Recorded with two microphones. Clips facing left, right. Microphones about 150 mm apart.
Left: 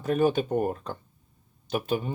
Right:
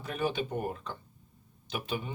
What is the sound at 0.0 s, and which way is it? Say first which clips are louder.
Speech: left 9 dB; 45° left (ahead or behind).